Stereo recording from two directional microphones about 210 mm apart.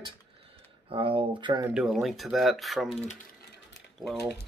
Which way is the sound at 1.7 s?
Centre (ahead or behind).